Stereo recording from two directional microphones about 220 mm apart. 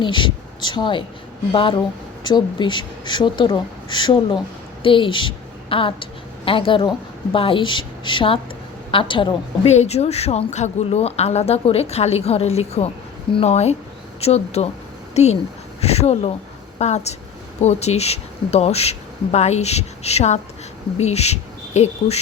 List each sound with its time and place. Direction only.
0.0 s a woman's voice: 20° left (ahead or behind)